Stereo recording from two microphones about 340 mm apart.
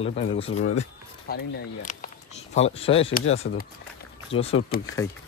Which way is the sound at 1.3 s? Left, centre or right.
Left.